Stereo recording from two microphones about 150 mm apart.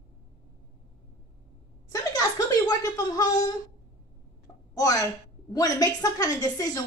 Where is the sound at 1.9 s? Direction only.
25° left (ahead or behind).